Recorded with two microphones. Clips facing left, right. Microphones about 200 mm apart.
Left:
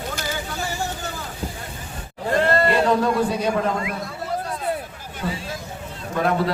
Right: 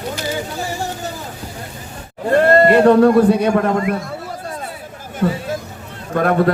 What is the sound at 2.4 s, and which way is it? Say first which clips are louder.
A man's voice: right 8 dB; 50° right (ahead or behind).